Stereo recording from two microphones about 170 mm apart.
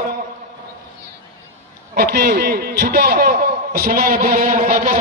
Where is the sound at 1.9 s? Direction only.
65° right (ahead or behind).